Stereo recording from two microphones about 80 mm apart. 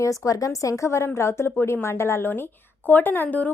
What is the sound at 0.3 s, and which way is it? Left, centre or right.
A woman's voice, left.